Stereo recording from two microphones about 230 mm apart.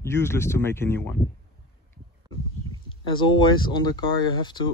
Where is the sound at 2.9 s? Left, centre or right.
Centre.